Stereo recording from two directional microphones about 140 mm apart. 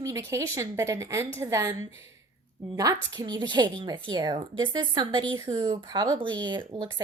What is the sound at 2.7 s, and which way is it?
A woman's voice, 25° right (ahead or behind).